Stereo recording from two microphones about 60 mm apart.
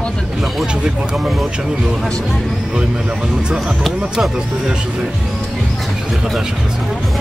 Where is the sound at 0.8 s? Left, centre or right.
Centre.